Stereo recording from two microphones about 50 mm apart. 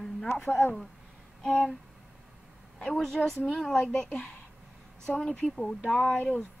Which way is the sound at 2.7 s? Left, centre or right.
Centre.